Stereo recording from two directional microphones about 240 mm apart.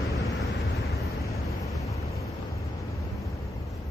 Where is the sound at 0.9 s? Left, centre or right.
Centre.